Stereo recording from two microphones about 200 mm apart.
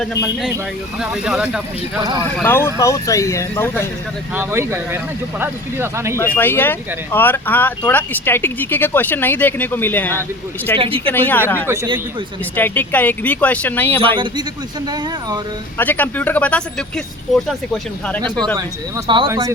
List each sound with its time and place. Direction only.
0.9 s speech: 5° right (ahead or behind)
2.4 s speech: 10° left (ahead or behind)
4.4 s speech: 10° right (ahead or behind)
6.1 s speech: 10° left (ahead or behind)
10.8 s speech: 25° right (ahead or behind)
11.0 s speech: 10° left (ahead or behind)
15.8 s speech: 10° left (ahead or behind)
18.5 s speech: 25° right (ahead or behind)